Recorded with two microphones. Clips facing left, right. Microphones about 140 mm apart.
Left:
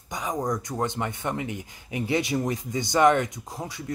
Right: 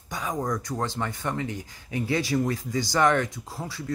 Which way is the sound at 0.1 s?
20° left (ahead or behind).